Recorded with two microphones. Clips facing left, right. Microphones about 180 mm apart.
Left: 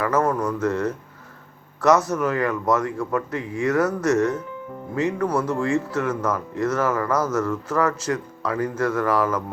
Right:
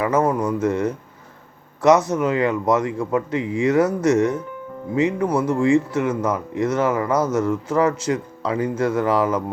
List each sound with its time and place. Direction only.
0.0 s speech: 15° right (ahead or behind)